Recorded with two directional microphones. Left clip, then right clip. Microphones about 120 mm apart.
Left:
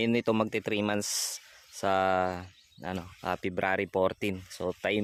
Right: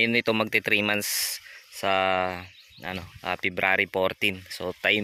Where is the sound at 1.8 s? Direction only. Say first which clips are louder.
Right 3 dB; 30° left (ahead or behind).